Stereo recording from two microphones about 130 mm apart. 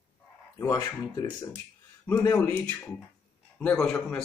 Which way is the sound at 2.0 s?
15° left (ahead or behind).